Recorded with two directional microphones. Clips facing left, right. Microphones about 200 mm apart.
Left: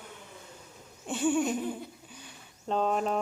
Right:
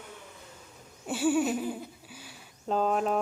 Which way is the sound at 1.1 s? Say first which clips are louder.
Right 1 dB; 5° right (ahead or behind).